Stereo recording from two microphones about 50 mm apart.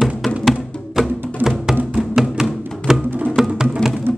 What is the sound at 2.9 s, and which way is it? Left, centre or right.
Music, centre.